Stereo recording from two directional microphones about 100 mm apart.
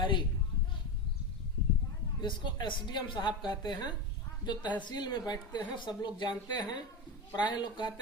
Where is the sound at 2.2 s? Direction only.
50° left (ahead or behind).